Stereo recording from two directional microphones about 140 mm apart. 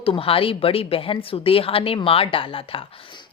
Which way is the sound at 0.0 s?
40° left (ahead or behind).